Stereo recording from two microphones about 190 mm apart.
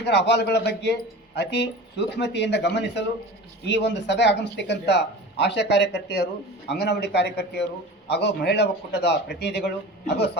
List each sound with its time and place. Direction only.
0.0 s speech: 65° left (ahead or behind)